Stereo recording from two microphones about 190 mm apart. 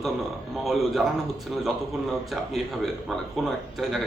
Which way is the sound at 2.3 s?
Centre (ahead or behind).